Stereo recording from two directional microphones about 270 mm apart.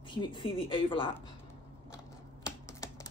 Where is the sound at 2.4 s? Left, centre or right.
Centre.